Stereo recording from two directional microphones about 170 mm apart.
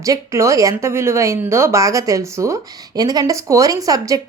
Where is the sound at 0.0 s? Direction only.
20° right (ahead or behind).